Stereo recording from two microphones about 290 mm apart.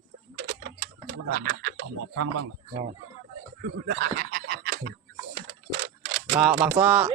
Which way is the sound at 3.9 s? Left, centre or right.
Right.